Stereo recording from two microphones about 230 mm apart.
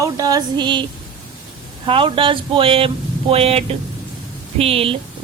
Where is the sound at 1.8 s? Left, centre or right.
Right.